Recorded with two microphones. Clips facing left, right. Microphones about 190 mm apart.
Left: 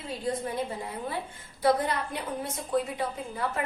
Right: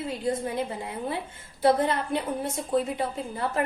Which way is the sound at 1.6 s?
25° right (ahead or behind).